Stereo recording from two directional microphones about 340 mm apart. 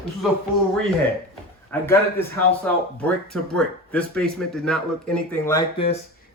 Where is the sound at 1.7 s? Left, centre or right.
Centre.